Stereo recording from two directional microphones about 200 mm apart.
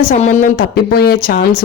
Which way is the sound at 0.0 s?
40° left (ahead or behind).